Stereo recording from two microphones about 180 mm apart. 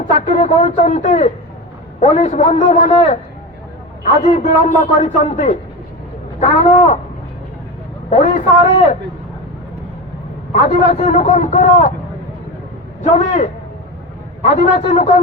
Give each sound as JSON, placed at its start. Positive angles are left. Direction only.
{"t": 0.0, "sound": "a man's voice", "side_deg": 45}
{"t": 4.3, "sound": "a man's voice", "side_deg": 35}
{"t": 8.1, "sound": "speech", "side_deg": 40}
{"t": 10.5, "sound": "a man's voice", "side_deg": 40}
{"t": 13.0, "sound": "a man's voice", "side_deg": 40}